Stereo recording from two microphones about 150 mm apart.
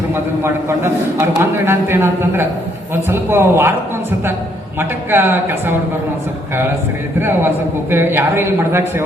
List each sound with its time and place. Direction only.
0.1 s a man's voice: 15° right (ahead or behind)
4.8 s a man's voice: 15° right (ahead or behind)
7.2 s a man's voice: 15° right (ahead or behind)